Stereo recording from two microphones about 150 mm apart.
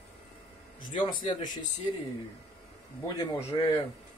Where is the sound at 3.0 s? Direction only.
25° left (ahead or behind).